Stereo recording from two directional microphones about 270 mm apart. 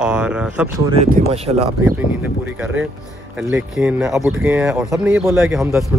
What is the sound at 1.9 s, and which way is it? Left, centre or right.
Speech, centre.